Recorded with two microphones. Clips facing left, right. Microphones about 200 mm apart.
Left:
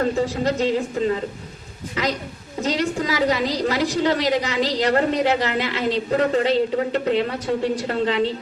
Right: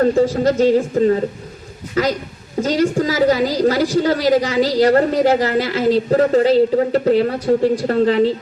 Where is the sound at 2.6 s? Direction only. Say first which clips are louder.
Right 6 dB; 45° right (ahead or behind).